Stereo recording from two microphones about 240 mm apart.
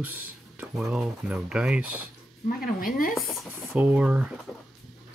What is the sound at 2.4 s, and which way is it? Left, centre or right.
Speech, left.